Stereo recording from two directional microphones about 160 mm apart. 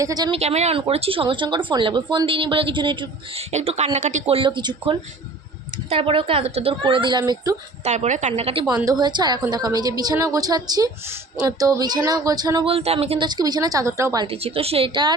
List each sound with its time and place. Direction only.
0.0 s a woman's voice: 25° right (ahead or behind)
0.3 s a woman's voice: 45° right (ahead or behind)
4.4 s a woman's voice: 30° right (ahead or behind)
7.9 s a woman's voice: 45° right (ahead or behind)
8.7 s a woman's voice: 25° right (ahead or behind)
12.7 s speech: 40° right (ahead or behind)
13.2 s a woman's voice: 25° right (ahead or behind)
14.3 s speech: 35° right (ahead or behind)